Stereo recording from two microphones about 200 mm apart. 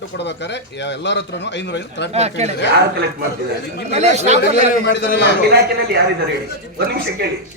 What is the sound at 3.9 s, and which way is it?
Speech, 35° right (ahead or behind).